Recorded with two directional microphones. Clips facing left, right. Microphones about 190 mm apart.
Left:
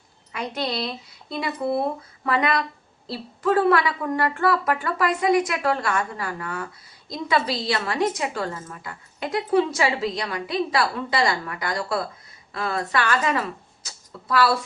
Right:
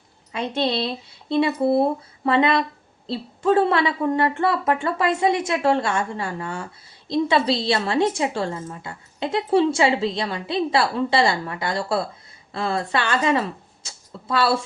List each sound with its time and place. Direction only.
0.3 s a woman's voice: 25° right (ahead or behind)